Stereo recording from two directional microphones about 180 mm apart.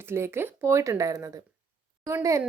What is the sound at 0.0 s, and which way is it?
A woman's voice, 15° right (ahead or behind).